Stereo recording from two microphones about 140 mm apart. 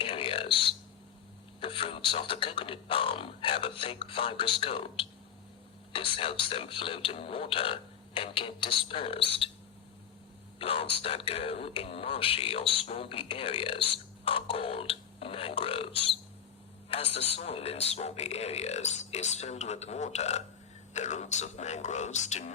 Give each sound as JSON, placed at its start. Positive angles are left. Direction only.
{"t": 0.0, "sound": "a sound", "side_deg": 40}
{"t": 1.6, "sound": "speech", "side_deg": 40}
{"t": 10.6, "sound": "a man's voice", "side_deg": 40}